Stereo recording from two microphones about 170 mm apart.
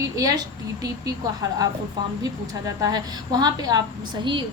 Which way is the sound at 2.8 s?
25° right (ahead or behind).